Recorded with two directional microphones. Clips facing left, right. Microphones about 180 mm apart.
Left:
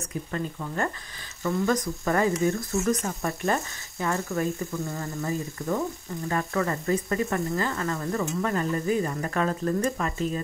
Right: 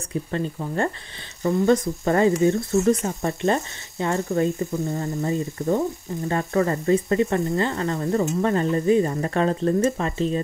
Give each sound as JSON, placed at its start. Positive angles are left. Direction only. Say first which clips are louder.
{"t": 0.3, "sound": "speech", "louder": "right 4 dB", "side_deg": -30}
{"t": 2.7, "sound": "speech", "louder": "right 7 dB", "side_deg": -35}
{"t": 3.1, "sound": "speech", "louder": "right 4 dB", "side_deg": -20}
{"t": 4.2, "sound": "speech", "louder": "right 6 dB", "side_deg": -35}
{"t": 4.7, "sound": "speech", "louder": "right 6 dB", "side_deg": -20}
{"t": 8.0, "sound": "speech", "louder": "right 9 dB", "side_deg": -40}